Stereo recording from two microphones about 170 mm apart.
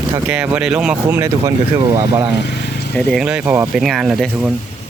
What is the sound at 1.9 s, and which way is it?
Speech, 25° right (ahead or behind).